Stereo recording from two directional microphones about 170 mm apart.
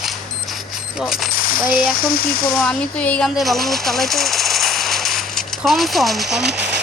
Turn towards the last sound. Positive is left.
turn(degrees=0)  # may be behind; listen again after turning